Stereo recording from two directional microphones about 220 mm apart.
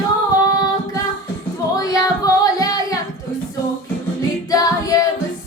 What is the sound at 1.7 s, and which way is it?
Singing, 15° left (ahead or behind).